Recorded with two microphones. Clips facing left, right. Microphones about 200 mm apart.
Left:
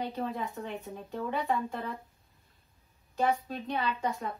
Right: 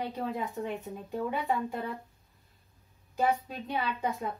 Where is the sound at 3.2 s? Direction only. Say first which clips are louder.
Even; 5° right (ahead or behind).